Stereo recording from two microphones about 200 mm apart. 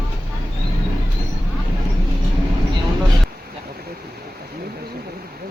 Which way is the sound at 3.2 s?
50° right (ahead or behind).